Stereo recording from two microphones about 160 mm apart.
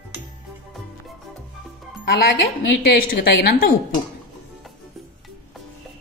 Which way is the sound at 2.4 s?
90° left.